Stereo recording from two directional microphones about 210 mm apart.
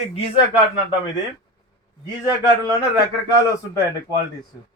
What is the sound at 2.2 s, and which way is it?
Speech, 20° left (ahead or behind).